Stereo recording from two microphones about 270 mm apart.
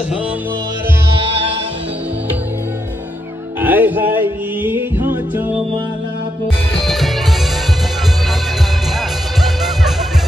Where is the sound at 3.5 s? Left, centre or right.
Centre.